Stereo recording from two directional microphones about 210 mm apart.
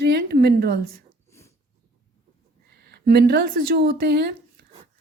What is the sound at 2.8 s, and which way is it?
Speech, 50° right (ahead or behind).